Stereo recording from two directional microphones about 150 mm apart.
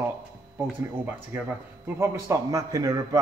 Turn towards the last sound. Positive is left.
turn(degrees=-25)  # may be behind; listen again after turning